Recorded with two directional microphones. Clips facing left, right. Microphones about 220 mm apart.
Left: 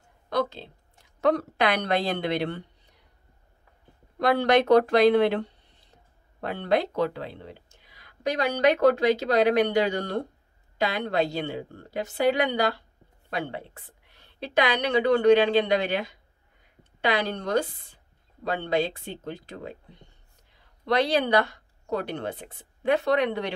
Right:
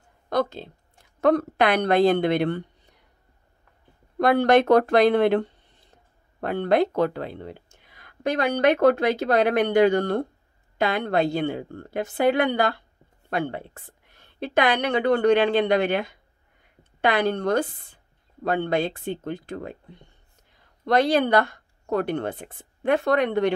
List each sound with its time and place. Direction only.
0.3 s speech: 45° right (ahead or behind)
4.2 s speech: 50° right (ahead or behind)
20.8 s speech: 50° right (ahead or behind)